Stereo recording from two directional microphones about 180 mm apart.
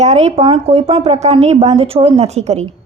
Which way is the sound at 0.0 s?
40° right (ahead or behind).